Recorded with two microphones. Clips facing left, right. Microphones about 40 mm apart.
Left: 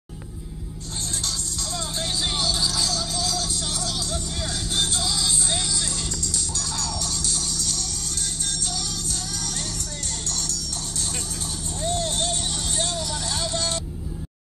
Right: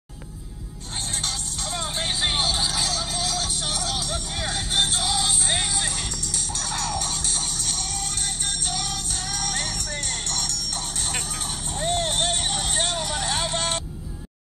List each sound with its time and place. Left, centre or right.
1.2 s music: right
11.8 s vehicle: right